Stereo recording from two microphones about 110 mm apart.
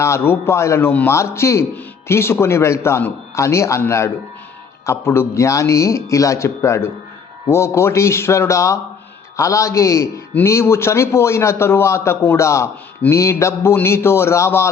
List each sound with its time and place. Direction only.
0.0 s a man's voice: 25° left (ahead or behind)